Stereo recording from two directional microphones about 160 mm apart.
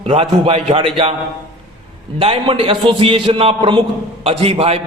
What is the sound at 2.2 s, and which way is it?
A man's voice, 35° right (ahead or behind).